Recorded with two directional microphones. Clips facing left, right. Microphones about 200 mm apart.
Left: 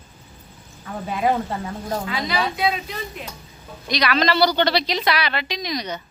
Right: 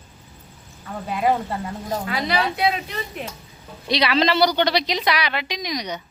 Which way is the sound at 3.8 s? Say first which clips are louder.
Right 1 dB; 30° right (ahead or behind).